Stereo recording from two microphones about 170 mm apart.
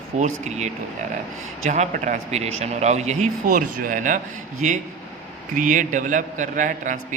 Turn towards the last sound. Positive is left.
turn(degrees=-50)  # may be behind; listen again after turning